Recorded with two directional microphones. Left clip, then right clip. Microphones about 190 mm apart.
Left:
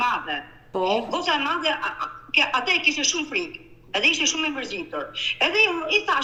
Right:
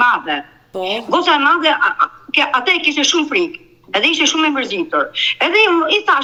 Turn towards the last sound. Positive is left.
turn(degrees=-25)  # may be behind; listen again after turning